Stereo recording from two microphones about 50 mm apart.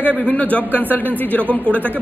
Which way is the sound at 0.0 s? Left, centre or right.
Left.